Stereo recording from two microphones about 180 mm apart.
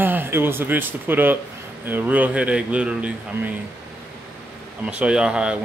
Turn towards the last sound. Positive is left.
turn(degrees=-5)  # may be behind; listen again after turning